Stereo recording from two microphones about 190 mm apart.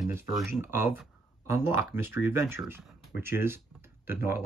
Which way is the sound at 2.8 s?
Centre (ahead or behind).